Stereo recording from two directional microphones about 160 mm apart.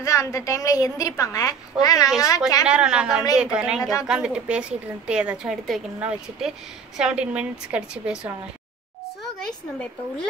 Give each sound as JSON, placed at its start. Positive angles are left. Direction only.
{"t": 0.0, "sound": "a woman's voice", "side_deg": 20}
{"t": 2.6, "sound": "a woman's voice", "side_deg": -5}